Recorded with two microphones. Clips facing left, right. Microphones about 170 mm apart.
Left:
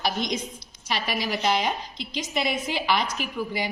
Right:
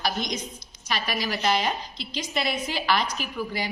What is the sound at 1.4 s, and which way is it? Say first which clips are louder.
A woman's voice: even; 10° left (ahead or behind).